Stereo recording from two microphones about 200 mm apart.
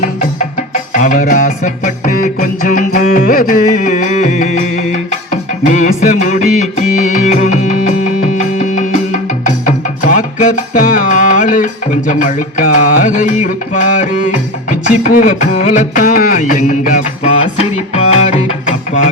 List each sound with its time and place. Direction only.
0.0 s music: 40° left (ahead or behind)